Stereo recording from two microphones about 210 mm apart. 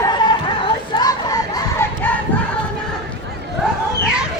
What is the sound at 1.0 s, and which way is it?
Children playing, 20° left (ahead or behind).